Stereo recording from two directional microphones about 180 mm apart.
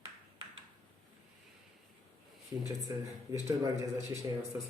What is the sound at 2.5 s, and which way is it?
Speech, 15° right (ahead or behind).